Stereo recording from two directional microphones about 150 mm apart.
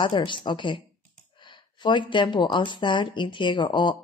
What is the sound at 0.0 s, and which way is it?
Speech, 35° left (ahead or behind).